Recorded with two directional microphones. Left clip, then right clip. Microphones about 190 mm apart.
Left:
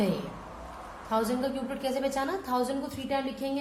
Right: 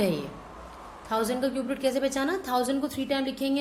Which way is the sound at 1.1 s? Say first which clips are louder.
Right 2 dB; 35° right (ahead or behind).